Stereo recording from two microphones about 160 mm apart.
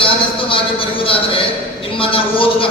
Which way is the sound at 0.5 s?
35° left (ahead or behind).